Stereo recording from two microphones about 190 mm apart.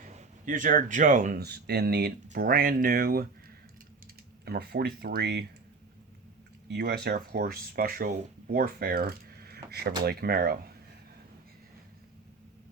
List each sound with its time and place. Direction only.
0.1 s speech: 40° right (ahead or behind); by 5.5 s 60° right (ahead or behind)
6.7 s speech: 60° right (ahead or behind)